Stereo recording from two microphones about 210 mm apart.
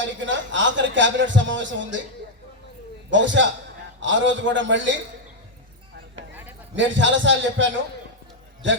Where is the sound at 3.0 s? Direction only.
60° right (ahead or behind).